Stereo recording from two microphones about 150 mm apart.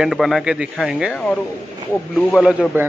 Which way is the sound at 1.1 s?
10° left (ahead or behind).